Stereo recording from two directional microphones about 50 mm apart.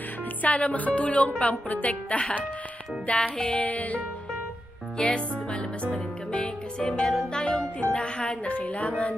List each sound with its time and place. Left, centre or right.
0.4 s speech: left
3.6 s music: left
7.9 s speech: left